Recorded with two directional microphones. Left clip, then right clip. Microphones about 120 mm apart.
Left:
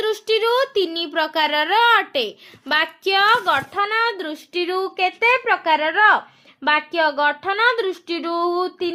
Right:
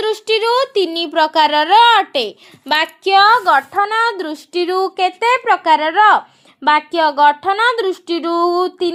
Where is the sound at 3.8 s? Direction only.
45° right (ahead or behind).